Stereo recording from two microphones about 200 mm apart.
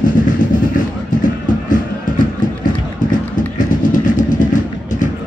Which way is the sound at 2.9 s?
40° left (ahead or behind).